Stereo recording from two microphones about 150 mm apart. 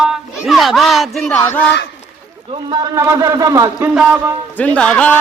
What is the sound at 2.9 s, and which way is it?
Speech, 20° right (ahead or behind).